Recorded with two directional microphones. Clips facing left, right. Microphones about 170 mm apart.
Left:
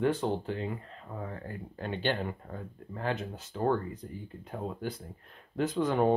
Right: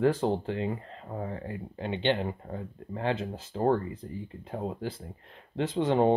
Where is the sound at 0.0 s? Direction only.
30° right (ahead or behind).